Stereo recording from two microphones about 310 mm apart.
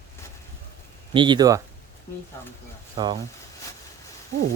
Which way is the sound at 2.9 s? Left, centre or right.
Centre.